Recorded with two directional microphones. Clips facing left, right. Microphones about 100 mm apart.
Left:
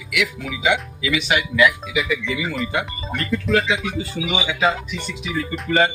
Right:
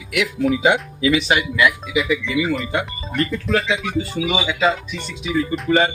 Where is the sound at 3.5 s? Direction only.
Centre (ahead or behind).